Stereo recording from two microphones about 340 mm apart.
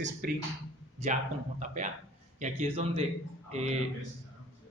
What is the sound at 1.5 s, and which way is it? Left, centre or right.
Speech, right.